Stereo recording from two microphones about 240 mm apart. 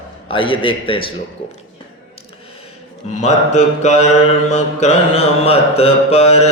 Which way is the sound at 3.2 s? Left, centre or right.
Left.